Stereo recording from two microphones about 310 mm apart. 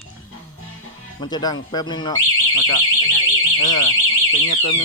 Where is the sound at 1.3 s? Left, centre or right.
Centre.